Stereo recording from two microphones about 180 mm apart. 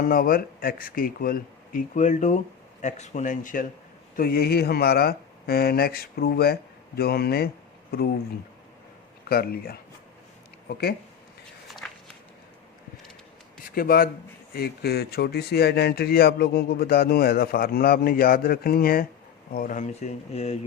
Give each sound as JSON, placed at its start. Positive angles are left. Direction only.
{"t": 0.0, "sound": "speech", "side_deg": 55}
{"t": 4.2, "sound": "speech", "side_deg": 60}
{"t": 9.3, "sound": "speech", "side_deg": 55}
{"t": 13.7, "sound": "speech", "side_deg": 55}